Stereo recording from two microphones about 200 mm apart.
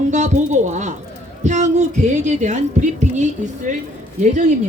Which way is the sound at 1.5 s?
35° right (ahead or behind).